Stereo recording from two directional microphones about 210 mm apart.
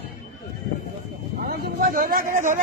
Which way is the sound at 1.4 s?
45° right (ahead or behind).